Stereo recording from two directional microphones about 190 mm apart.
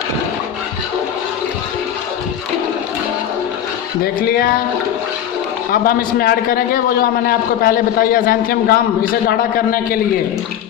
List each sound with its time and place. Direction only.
5.7 s a man's voice: 50° left (ahead or behind)